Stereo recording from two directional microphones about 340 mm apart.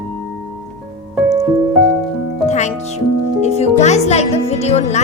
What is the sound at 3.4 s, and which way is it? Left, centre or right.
Speech, centre.